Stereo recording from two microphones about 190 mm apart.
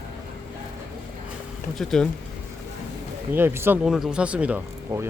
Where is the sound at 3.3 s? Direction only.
10° right (ahead or behind).